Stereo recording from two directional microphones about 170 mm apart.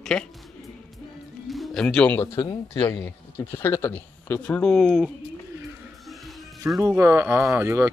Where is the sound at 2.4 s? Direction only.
20° left (ahead or behind); by 5.1 s centre (ahead or behind).